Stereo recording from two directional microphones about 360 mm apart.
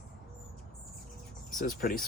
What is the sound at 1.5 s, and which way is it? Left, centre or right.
Speech, left.